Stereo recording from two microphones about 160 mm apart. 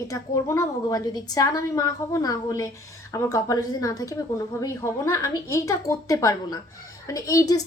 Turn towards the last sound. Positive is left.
turn(degrees=20)  # may be behind; listen again after turning